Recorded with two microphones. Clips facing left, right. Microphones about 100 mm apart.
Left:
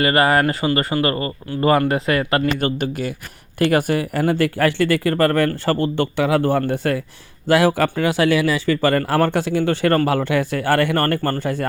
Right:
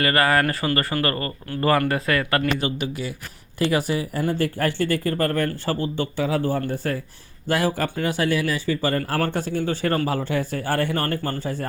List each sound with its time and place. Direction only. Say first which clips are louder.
0.0 s speech: left 4 dB; 25° left (ahead or behind)
2.6 s speech: left 5 dB; 50° left (ahead or behind); by 7.0 s 80° left
7.4 s a man's voice: left 7 dB; 90° left; by 11.6 s 70° left (ahead or behind)